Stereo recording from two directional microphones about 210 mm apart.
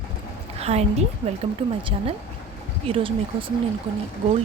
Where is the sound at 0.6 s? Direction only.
30° right (ahead or behind).